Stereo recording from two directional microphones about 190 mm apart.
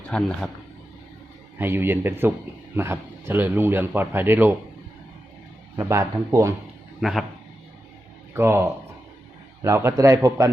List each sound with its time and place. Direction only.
0.0 s a man's voice: 5° left (ahead or behind)
1.5 s speech: 10° right (ahead or behind)
5.7 s speech: 15° right (ahead or behind)
7.0 s a man's voice: centre (ahead or behind)
8.3 s speech: 15° right (ahead or behind)